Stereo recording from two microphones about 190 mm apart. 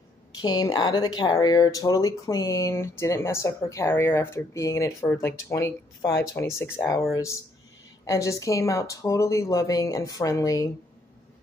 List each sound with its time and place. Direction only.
0.4 s speech: 20° left (ahead or behind)